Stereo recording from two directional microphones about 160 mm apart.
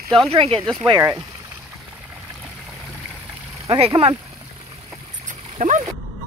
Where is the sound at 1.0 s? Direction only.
25° right (ahead or behind).